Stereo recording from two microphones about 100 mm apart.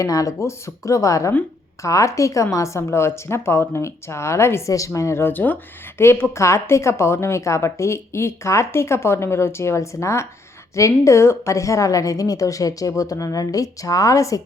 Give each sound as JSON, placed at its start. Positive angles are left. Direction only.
{"t": 0.0, "sound": "a woman's voice", "side_deg": 35}